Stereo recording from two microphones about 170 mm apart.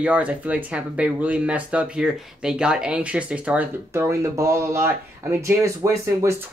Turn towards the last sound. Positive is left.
turn(degrees=-15)  # may be behind; listen again after turning